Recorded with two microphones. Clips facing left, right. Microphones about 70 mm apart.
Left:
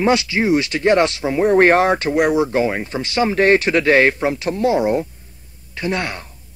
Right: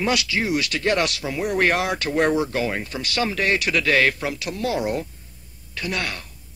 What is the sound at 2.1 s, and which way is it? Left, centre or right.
Speech, centre.